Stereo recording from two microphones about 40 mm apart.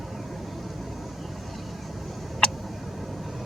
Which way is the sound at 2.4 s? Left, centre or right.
Centre.